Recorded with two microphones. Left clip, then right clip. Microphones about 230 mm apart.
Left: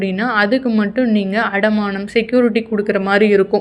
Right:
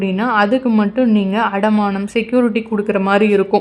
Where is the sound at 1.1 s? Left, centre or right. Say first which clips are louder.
Right 1 dB; centre.